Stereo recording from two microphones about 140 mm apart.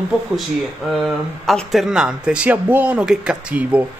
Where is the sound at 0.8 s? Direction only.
Centre (ahead or behind).